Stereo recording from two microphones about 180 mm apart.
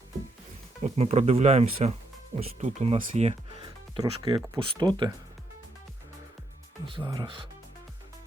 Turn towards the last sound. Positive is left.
turn(degrees=-25)  # may be behind; listen again after turning